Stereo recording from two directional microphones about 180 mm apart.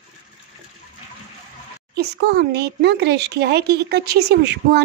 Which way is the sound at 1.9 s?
65° right (ahead or behind).